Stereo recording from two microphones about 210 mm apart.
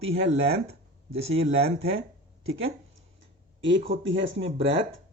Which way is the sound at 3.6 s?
60° right (ahead or behind).